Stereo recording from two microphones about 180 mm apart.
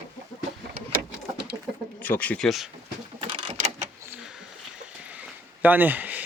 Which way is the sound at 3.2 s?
30° right (ahead or behind).